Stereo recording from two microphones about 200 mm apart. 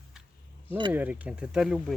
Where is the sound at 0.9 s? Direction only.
10° right (ahead or behind).